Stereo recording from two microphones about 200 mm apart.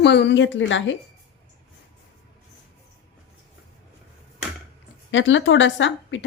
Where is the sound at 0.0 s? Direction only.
60° left (ahead or behind).